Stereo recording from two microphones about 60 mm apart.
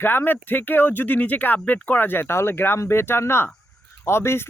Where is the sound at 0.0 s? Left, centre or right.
Left.